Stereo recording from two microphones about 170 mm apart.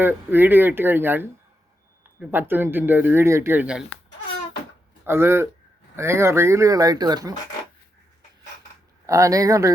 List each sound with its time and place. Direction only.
0.0 s speech: 10° right (ahead or behind)
2.3 s speech: 10° right (ahead or behind)
5.0 s speech: 15° right (ahead or behind)
9.0 s speech: 20° right (ahead or behind)